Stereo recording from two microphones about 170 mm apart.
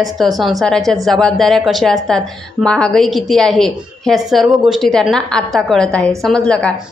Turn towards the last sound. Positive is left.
turn(degrees=5)  # may be behind; listen again after turning